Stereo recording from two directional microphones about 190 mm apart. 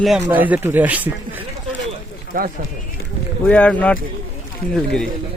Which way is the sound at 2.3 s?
50° right (ahead or behind).